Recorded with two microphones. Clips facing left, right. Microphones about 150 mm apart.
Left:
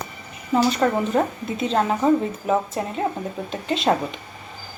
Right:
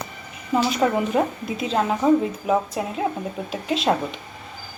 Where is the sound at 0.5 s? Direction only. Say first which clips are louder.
Left 1 dB; 5° right (ahead or behind).